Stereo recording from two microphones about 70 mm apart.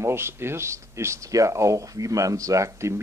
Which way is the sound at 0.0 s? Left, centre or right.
Right.